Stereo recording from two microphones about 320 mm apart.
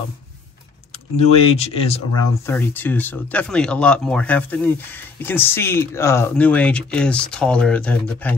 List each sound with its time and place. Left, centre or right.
1.1 s speech: centre
2.4 s speech: centre